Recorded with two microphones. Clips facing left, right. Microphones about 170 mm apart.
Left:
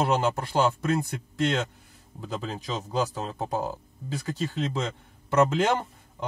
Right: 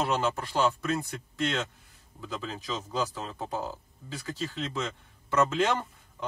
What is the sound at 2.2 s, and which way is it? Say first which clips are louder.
Speech: left 3 dB; 40° left (ahead or behind).